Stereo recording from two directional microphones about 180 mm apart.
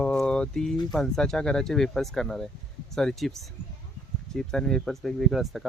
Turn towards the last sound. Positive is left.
turn(degrees=0)  # may be behind; listen again after turning